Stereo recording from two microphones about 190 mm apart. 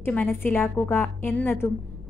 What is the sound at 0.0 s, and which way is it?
A woman's voice, 10° left (ahead or behind).